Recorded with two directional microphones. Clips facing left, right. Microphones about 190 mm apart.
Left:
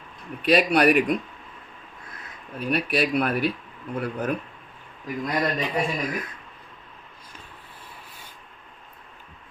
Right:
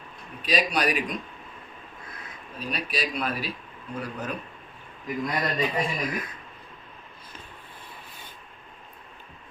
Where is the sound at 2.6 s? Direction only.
60° left (ahead or behind).